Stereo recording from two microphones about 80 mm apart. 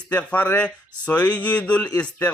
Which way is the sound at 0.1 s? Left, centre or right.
Centre.